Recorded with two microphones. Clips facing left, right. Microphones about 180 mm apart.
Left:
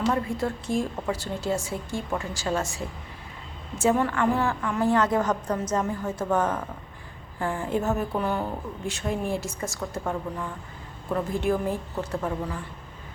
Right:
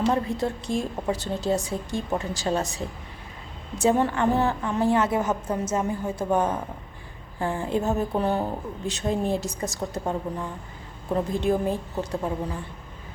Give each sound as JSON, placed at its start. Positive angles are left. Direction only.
{"t": 0.1, "sound": "speech", "side_deg": -20}
{"t": 3.8, "sound": "speech", "side_deg": -25}
{"t": 5.0, "sound": "a woman's voice", "side_deg": -10}
{"t": 5.5, "sound": "a woman's voice", "side_deg": -25}
{"t": 8.2, "sound": "a woman's voice", "side_deg": -30}
{"t": 8.9, "sound": "speech", "side_deg": -20}